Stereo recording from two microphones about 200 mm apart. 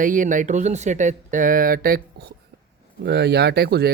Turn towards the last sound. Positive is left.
turn(degrees=-50)  # may be behind; listen again after turning